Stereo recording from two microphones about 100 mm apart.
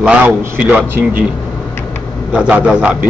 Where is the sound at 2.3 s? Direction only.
15° right (ahead or behind).